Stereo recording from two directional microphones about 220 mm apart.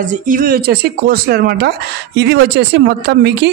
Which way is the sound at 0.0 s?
40° right (ahead or behind).